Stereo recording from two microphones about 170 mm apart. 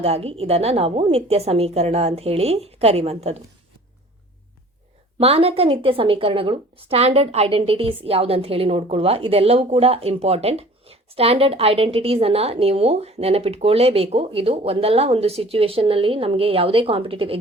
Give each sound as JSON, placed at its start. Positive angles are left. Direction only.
{"t": 0.0, "sound": "a woman's voice", "side_deg": -35}
{"t": 5.2, "sound": "a woman's voice", "side_deg": -35}